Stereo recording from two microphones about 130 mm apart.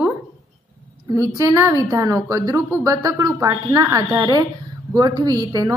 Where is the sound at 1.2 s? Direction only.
20° right (ahead or behind).